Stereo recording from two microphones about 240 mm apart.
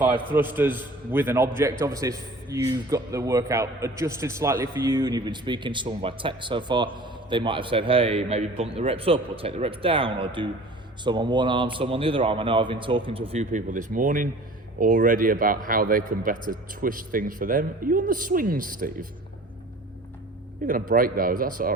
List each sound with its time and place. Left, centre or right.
0.0 s a man's voice: centre; by 18.9 s right
20.7 s speech: right